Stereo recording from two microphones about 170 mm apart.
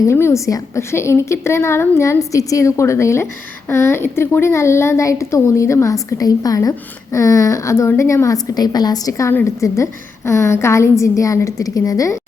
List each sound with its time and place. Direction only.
0.1 s a woman's voice: 15° left (ahead or behind)